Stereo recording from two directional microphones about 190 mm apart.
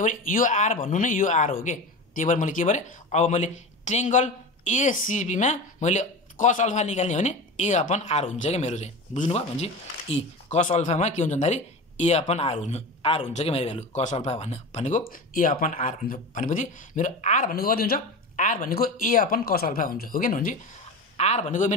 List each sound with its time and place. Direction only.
0.0 s speech: 45° left (ahead or behind)
21.2 s speech: 35° left (ahead or behind)